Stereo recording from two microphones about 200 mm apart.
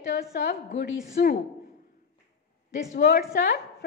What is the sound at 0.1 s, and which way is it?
Speech, 50° left (ahead or behind).